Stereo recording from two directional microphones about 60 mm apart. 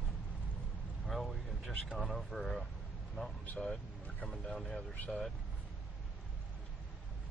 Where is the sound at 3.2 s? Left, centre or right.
Centre.